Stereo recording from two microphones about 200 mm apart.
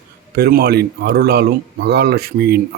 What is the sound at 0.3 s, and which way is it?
Speech, 50° right (ahead or behind).